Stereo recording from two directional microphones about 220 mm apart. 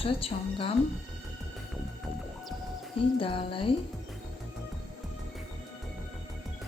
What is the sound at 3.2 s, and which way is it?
Speech, 25° left (ahead or behind).